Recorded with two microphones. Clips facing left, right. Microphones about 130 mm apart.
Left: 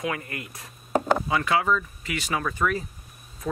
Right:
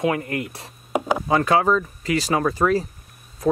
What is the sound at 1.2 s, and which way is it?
Speech, 40° right (ahead or behind).